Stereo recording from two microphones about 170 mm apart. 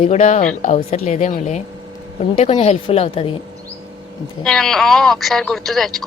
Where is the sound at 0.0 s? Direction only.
40° left (ahead or behind).